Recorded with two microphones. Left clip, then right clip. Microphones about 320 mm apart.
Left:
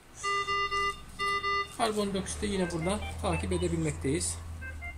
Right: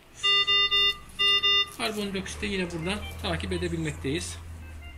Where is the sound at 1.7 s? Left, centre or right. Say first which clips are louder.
Left 1 dB; left.